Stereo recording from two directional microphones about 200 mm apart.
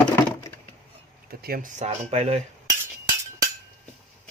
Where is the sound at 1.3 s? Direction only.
45° right (ahead or behind).